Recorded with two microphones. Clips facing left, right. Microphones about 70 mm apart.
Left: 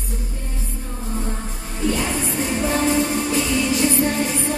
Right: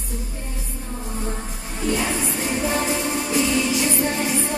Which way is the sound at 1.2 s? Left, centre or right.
Centre.